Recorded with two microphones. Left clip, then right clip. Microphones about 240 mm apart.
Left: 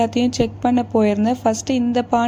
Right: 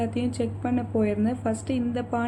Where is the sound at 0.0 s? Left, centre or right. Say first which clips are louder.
Left 10 dB; left.